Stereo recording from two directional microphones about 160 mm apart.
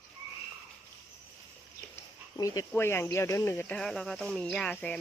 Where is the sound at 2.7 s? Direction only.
15° left (ahead or behind).